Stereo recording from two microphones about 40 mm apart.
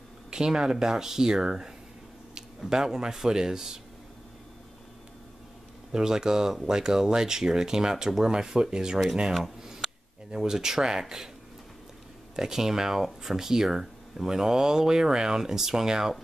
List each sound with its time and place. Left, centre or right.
0.3 s speech: centre
2.7 s speech: centre
5.9 s speech: centre
12.4 s speech: centre